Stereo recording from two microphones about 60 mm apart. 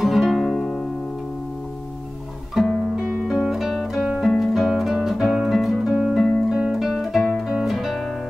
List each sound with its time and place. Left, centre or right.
0.0 s music: centre
2.5 s music: centre
6.5 s guitar: centre
7.6 s music: centre